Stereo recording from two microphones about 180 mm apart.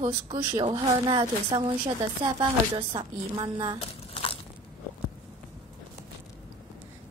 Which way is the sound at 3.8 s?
30° left (ahead or behind).